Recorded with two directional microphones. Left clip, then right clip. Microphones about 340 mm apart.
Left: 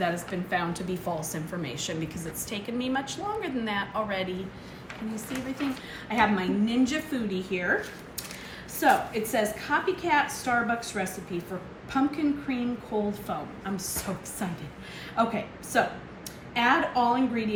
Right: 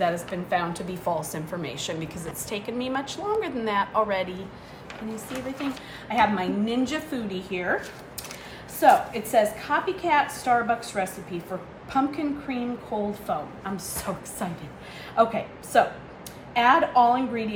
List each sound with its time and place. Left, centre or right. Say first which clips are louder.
0.5 s a woman's voice: right 3 dB; centre
6.1 s a woman's voice: right 3 dB; centre